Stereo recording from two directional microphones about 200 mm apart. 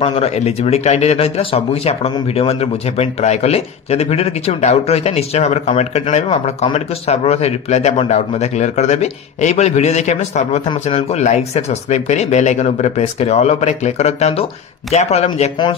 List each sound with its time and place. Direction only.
0.0 s speech: 30° left (ahead or behind)